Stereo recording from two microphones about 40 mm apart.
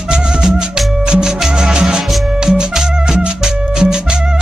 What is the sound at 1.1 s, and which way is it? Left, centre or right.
Music, centre.